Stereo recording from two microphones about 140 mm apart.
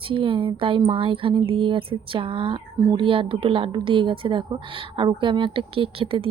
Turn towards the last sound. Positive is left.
turn(degrees=-40)  # may be behind; listen again after turning